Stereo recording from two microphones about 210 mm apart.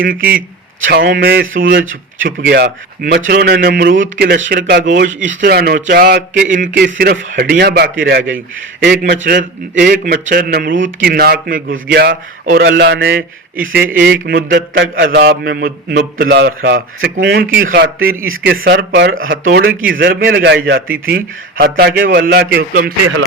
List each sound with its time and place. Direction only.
0.8 s a man's voice: 50° right (ahead or behind)
4.5 s speech: 40° right (ahead or behind)
5.4 s a man's voice: 50° right (ahead or behind)
13.6 s a man's voice: 50° right (ahead or behind)
18.3 s speech: 70° right (ahead or behind)
18.6 s a man's voice: 50° right (ahead or behind)
18.9 s a man's voice: 65° right (ahead or behind); by 23.0 s 45° right (ahead or behind)